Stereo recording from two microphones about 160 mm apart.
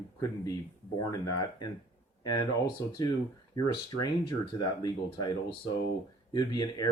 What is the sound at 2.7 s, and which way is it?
Speech, 25° left (ahead or behind).